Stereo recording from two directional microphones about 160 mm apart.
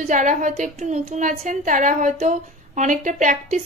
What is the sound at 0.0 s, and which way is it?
A woman's voice, 50° right (ahead or behind).